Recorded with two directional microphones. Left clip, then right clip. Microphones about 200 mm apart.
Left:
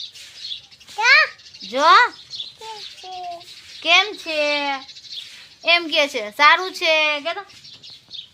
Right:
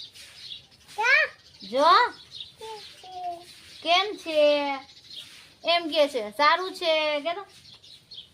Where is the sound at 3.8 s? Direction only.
15° left (ahead or behind).